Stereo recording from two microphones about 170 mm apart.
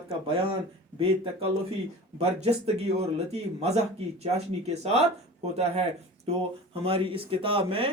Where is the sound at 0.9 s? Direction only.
30° right (ahead or behind).